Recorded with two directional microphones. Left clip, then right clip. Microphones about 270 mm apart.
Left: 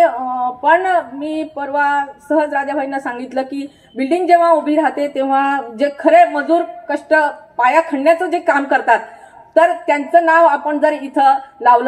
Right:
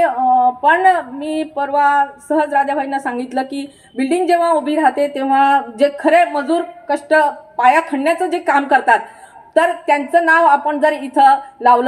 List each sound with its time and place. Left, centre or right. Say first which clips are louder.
0.0 s speech: right 2 dB; right